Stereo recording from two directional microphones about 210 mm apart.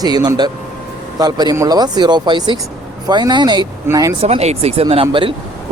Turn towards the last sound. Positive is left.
turn(degrees=-25)  # may be behind; listen again after turning